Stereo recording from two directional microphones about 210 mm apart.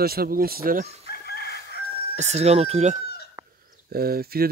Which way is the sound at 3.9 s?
45° right (ahead or behind).